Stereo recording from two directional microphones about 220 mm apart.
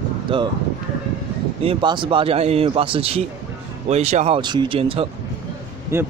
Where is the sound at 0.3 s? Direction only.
25° right (ahead or behind).